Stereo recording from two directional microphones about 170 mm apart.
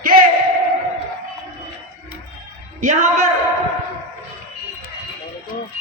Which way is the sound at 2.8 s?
45° right (ahead or behind).